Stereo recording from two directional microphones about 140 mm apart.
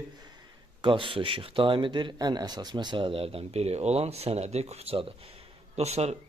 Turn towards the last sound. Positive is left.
turn(degrees=-50)  # may be behind; listen again after turning